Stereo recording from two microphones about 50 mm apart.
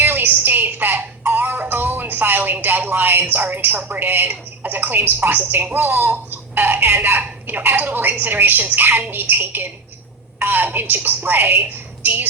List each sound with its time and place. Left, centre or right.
0.0 s music: right
1.6 s a woman's voice: right